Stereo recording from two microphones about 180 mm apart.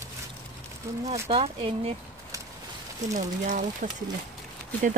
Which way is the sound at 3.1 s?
45° right (ahead or behind).